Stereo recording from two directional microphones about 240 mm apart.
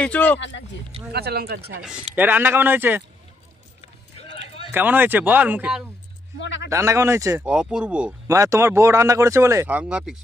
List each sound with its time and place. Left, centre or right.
0.0 s speech: centre
0.4 s speech: left
1.1 s speech: right
1.9 s speech: centre
4.7 s speech: centre
6.4 s a man's voice: left
6.7 s speech: centre